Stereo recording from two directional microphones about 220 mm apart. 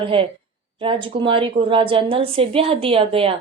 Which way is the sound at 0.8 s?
25° right (ahead or behind).